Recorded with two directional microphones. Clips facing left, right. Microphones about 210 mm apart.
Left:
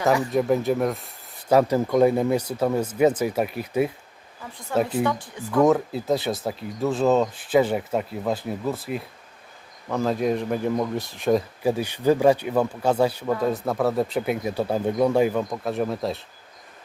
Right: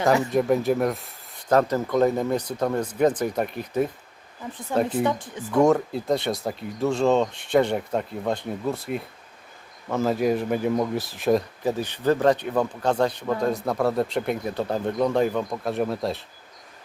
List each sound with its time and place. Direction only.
0.3 s speech: centre (ahead or behind)
4.7 s speech: 20° right (ahead or behind)
5.6 s speech: centre (ahead or behind)
11.6 s speech: 10° left (ahead or behind)